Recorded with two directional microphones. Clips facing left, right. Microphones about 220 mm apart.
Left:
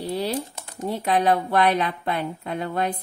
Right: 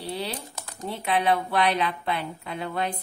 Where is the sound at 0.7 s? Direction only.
45° left (ahead or behind).